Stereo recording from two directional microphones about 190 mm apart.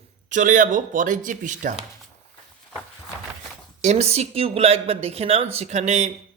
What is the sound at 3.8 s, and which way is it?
Speech, 35° right (ahead or behind).